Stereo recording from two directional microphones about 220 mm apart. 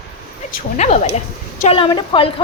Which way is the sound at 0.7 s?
30° left (ahead or behind).